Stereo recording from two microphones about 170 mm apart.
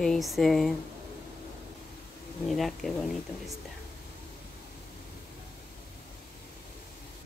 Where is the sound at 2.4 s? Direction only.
Centre (ahead or behind).